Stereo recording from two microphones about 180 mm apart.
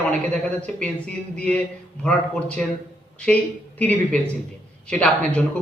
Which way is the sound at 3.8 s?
10° left (ahead or behind).